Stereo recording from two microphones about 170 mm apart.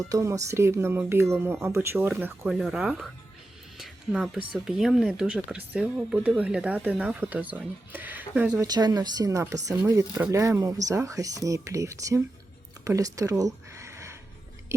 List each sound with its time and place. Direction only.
0.1 s speech: 20° right (ahead or behind)
8.6 s speech: 25° right (ahead or behind)
12.8 s a sound: 20° right (ahead or behind)